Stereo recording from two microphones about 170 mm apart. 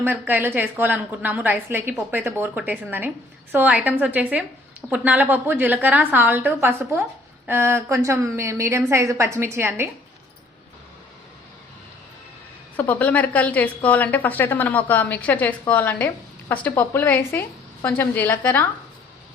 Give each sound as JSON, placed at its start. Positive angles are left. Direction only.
{"t": 0.0, "sound": "a woman's voice", "side_deg": -10}
{"t": 12.7, "sound": "a woman's voice", "side_deg": 10}